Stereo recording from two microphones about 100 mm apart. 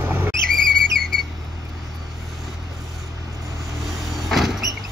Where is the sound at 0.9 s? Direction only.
5° left (ahead or behind).